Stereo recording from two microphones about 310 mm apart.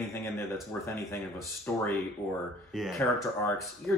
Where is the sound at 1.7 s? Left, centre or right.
Centre.